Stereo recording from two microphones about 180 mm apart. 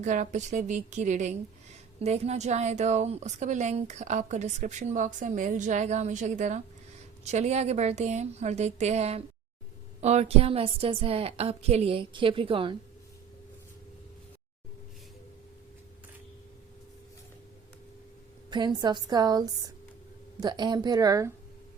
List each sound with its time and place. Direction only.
0.0 s a woman's voice: 45° right (ahead or behind)
18.8 s a woman's voice: 20° right (ahead or behind)